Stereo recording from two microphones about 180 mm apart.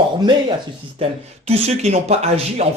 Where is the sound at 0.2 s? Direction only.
25° right (ahead or behind).